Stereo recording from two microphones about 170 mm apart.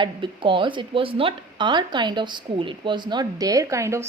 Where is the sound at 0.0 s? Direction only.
30° right (ahead or behind).